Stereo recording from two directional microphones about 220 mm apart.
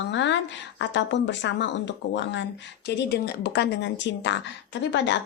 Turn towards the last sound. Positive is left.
turn(degrees=55)  # may be behind; listen again after turning